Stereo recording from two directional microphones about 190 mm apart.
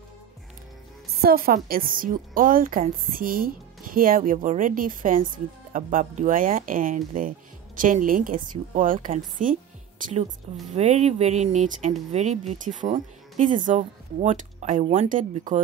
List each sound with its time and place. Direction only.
1.2 s a woman's voice: 50° right (ahead or behind)